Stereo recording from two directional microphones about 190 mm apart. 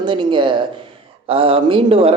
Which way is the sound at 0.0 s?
25° right (ahead or behind).